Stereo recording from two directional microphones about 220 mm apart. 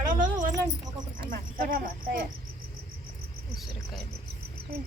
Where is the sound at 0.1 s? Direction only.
40° right (ahead or behind).